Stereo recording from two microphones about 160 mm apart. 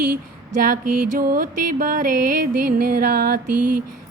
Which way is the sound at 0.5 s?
55° right (ahead or behind).